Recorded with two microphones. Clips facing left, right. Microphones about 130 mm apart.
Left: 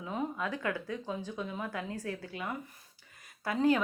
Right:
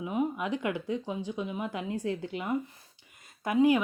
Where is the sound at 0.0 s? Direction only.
15° right (ahead or behind).